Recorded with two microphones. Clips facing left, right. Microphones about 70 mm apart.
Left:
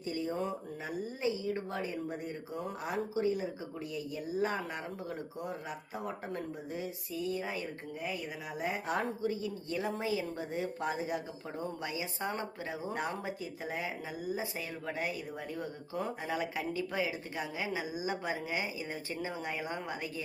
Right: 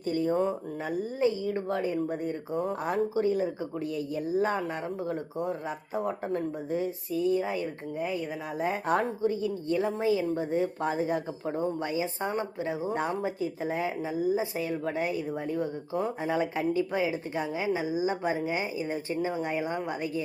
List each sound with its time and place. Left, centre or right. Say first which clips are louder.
0.0 s speech: right 8 dB; right